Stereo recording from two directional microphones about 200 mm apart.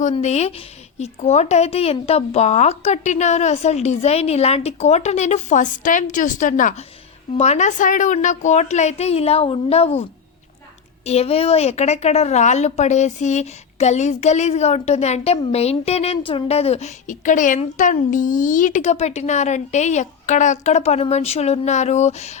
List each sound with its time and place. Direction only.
0.0 s a woman's voice: 35° left (ahead or behind)
11.0 s a woman's voice: 30° left (ahead or behind)